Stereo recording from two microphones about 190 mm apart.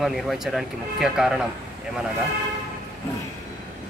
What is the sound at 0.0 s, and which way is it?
Speech, centre (ahead or behind).